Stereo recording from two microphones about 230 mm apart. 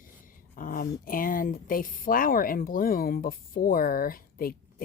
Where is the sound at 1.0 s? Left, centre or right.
Left.